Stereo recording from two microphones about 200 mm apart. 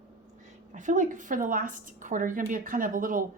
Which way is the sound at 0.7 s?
40° right (ahead or behind).